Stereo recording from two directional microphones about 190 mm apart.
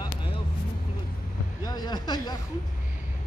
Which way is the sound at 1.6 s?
20° left (ahead or behind).